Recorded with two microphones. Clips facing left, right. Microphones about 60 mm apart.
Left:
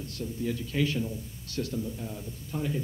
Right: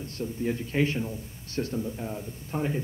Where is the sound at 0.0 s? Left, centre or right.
Right.